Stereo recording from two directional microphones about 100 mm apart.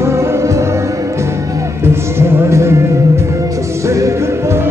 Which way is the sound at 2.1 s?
25° right (ahead or behind).